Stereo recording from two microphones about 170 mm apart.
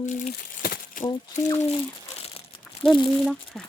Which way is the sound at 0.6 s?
65° left (ahead or behind).